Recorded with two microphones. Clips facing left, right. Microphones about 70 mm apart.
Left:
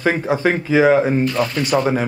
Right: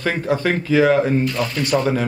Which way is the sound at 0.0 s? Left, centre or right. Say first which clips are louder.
Left 3 dB; centre.